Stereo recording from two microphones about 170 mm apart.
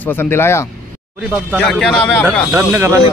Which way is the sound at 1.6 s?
Centre (ahead or behind).